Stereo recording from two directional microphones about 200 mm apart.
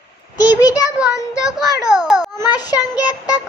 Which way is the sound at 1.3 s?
5° right (ahead or behind).